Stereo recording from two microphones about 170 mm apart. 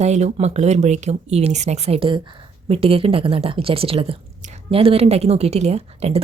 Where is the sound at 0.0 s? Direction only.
40° right (ahead or behind).